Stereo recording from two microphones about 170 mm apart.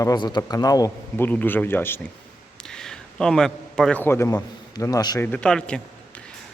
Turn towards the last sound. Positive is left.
turn(degrees=5)  # may be behind; listen again after turning